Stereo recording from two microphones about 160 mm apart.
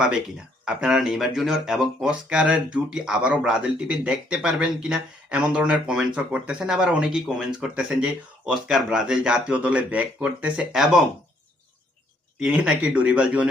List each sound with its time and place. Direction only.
0.6 s speech: 5° right (ahead or behind)
12.4 s speech: 5° right (ahead or behind)